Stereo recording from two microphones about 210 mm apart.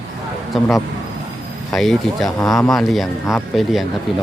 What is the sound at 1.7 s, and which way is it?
Speech, centre (ahead or behind).